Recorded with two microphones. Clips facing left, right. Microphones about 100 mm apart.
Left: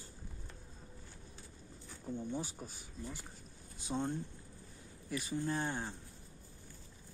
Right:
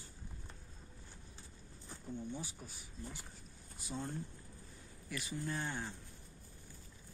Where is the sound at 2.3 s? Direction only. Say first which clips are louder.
Left 5 dB; 35° left (ahead or behind).